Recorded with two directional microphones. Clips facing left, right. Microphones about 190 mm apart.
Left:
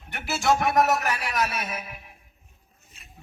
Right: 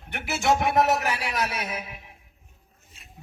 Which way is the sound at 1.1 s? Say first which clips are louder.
Left 1 dB; 30° right (ahead or behind).